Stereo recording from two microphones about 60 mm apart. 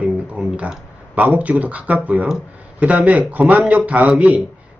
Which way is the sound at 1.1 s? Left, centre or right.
Right.